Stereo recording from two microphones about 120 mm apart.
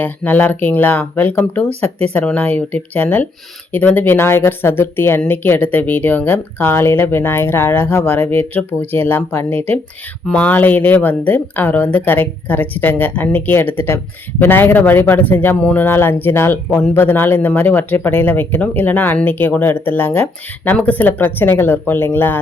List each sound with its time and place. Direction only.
0.0 s speech: 15° left (ahead or behind)